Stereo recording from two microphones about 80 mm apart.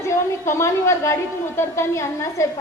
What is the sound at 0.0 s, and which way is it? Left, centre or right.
A woman's voice, left.